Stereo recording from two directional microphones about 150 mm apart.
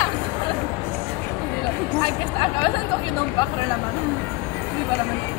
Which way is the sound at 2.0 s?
30° left (ahead or behind).